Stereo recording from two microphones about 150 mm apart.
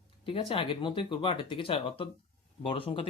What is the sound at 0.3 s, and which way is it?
Speech, 40° left (ahead or behind).